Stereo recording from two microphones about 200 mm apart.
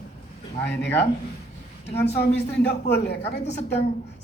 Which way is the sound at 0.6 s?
60° left (ahead or behind).